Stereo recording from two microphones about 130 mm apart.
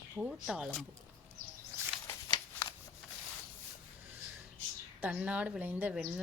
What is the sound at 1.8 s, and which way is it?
Bird flight, 20° right (ahead or behind).